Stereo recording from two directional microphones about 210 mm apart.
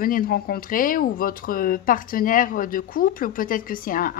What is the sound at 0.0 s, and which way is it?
Speech, 45° left (ahead or behind).